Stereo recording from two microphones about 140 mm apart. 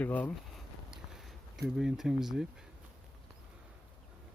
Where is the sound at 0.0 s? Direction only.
10° left (ahead or behind).